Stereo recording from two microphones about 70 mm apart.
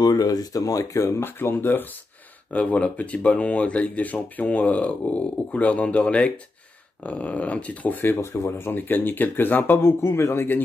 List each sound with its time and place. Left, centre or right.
0.0 s speech: left
1.2 s speech: left
8.2 s speech: left
8.5 s speech: left